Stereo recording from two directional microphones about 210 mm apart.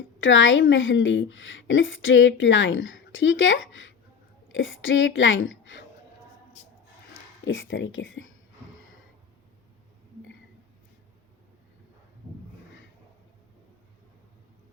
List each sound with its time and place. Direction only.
0.2 s a woman's voice: 65° left (ahead or behind)
7.1 s speech: 65° left (ahead or behind)